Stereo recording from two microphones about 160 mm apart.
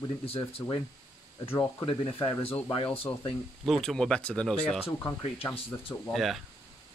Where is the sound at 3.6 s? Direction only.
Centre (ahead or behind).